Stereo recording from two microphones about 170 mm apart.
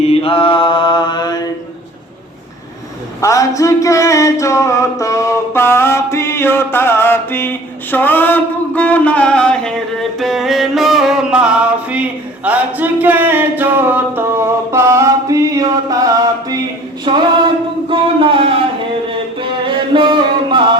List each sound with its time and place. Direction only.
0.0 s mantra: 35° left (ahead or behind)
3.2 s a sound: 20° left (ahead or behind)
10.2 s music: centre (ahead or behind)
12.5 s singing: 10° right (ahead or behind)
17.1 s female singing: 30° right (ahead or behind)
17.8 s a sound: 30° right (ahead or behind)
19.4 s music: 30° right (ahead or behind)